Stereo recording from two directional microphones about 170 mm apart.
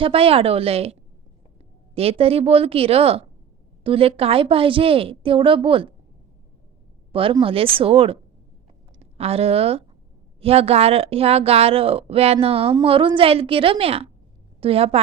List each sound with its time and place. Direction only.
0.0 s speech: 35° right (ahead or behind)
2.0 s speech: 35° right (ahead or behind)
7.1 s a woman's voice: 30° right (ahead or behind)